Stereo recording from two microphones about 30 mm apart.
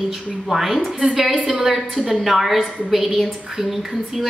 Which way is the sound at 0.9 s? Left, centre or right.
Centre.